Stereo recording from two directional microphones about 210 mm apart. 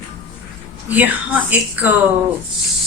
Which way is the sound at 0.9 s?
10° right (ahead or behind).